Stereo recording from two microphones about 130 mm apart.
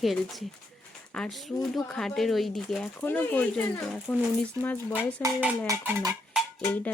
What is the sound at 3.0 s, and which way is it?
Speech, 15° left (ahead or behind).